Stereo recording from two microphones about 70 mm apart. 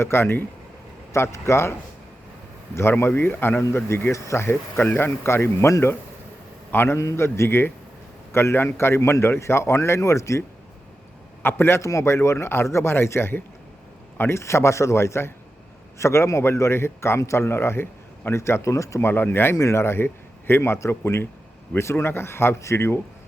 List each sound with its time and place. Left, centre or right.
0.0 s a man's voice: left
3.0 s a man's voice: left
4.4 s a man's voice: left
11.4 s a man's voice: left
19.0 s a man's voice: left
19.5 s speech: left
19.8 s a man's voice: left